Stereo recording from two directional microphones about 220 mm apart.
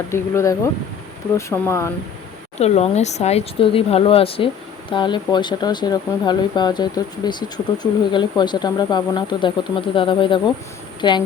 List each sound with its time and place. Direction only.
0.1 s speech: 15° left (ahead or behind)
2.6 s speech: 30° left (ahead or behind)